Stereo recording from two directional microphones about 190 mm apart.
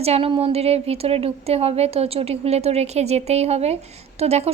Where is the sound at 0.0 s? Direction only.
30° right (ahead or behind).